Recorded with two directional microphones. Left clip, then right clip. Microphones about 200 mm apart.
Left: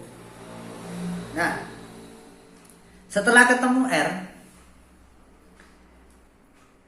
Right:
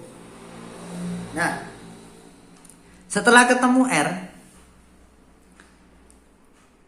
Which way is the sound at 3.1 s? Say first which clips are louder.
Right 1 dB; 40° right (ahead or behind).